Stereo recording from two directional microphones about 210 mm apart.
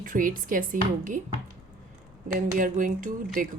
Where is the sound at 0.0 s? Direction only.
40° right (ahead or behind).